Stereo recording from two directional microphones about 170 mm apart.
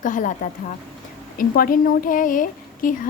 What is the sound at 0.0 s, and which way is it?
Speech, 50° left (ahead or behind).